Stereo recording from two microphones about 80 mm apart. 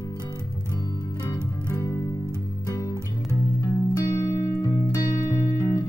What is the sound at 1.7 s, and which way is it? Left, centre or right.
Music, left.